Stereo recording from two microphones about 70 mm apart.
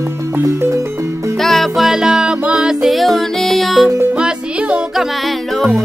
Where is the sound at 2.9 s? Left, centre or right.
Centre.